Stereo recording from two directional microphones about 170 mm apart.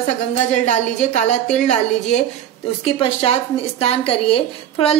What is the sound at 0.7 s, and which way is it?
A woman's voice, 45° left (ahead or behind).